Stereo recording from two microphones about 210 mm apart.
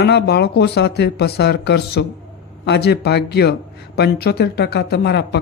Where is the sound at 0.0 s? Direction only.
50° left (ahead or behind).